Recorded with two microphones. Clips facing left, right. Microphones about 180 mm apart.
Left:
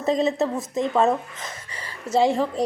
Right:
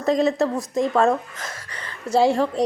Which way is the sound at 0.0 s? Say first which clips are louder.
Right 2 dB; 25° left (ahead or behind).